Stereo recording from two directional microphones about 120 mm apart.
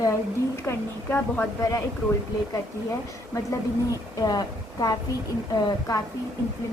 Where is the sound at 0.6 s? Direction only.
20° left (ahead or behind).